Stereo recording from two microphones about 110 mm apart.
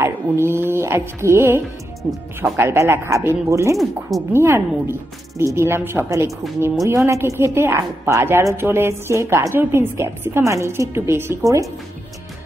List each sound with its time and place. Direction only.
0.0 s a woman's voice: 20° right (ahead or behind)
2.0 s speech: centre (ahead or behind)
2.5 s a woman's voice: 25° right (ahead or behind)
6.0 s a woman's voice: 30° right (ahead or behind)